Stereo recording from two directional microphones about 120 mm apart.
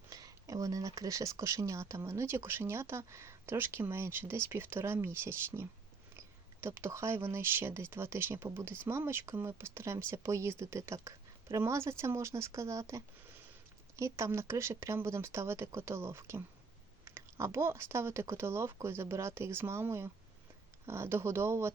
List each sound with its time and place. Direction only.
0.1 s speech: 30° right (ahead or behind)